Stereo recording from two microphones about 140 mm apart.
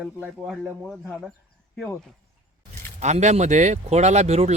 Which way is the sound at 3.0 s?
55° right (ahead or behind).